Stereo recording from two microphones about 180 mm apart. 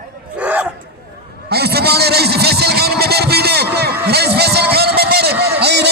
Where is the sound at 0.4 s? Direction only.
10° right (ahead or behind).